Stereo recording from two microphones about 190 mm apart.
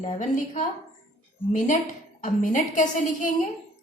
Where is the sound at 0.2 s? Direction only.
40° left (ahead or behind).